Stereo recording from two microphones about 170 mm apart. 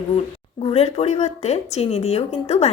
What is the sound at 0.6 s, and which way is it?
Speech, 35° left (ahead or behind).